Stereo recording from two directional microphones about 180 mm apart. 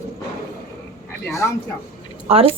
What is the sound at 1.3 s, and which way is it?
Speech, 15° left (ahead or behind).